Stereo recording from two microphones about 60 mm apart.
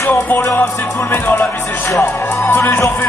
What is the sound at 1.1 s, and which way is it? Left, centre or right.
Speech, left.